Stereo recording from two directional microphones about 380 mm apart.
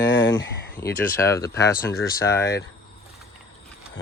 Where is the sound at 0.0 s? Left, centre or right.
Left.